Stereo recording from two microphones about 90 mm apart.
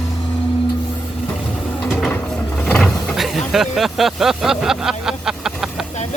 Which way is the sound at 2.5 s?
10° left (ahead or behind).